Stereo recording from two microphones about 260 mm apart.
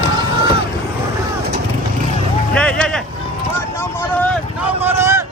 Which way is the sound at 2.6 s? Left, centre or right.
Centre.